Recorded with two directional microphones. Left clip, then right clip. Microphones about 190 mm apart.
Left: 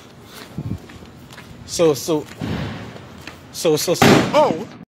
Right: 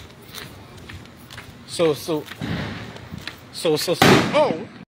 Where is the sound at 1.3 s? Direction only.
10° left (ahead or behind).